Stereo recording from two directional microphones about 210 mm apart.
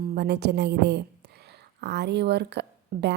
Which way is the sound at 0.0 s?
50° right (ahead or behind).